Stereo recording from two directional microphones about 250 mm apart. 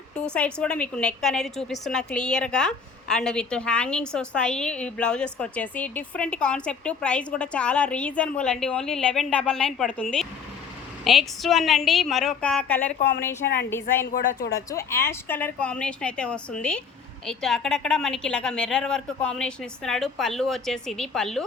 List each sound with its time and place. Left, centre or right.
0.3 s a woman's voice: centre
14.1 s speech: left
14.5 s a woman's voice: centre